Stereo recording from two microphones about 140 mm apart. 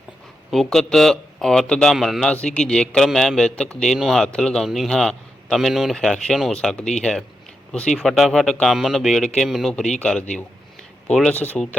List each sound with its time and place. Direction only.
0.5 s speech: centre (ahead or behind)